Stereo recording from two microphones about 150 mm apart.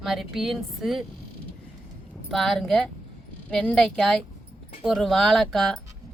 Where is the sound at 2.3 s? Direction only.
Centre (ahead or behind).